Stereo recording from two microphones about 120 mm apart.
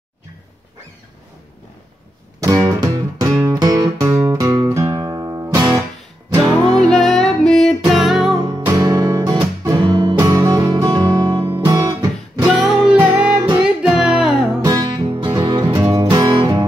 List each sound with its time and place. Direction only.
2.4 s music: 30° right (ahead or behind)
4.8 s guitar: 35° right (ahead or behind)
6.6 s music: 35° right (ahead or behind)
6.9 s music: centre (ahead or behind)
8.4 s music: 40° right (ahead or behind)
8.7 s guitar: 30° right (ahead or behind)
9.8 s music: 40° right (ahead or behind)
10.1 s music: 25° right (ahead or behind)
11.4 s guitar: 25° right (ahead or behind)
12.4 s music: 5° right (ahead or behind)
12.9 s music: 15° right (ahead or behind)
13.8 s music: 10° right (ahead or behind)
14.6 s music: 30° right (ahead or behind)